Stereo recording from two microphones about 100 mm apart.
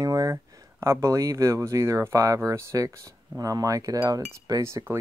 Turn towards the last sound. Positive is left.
turn(degrees=-30)  # may be behind; listen again after turning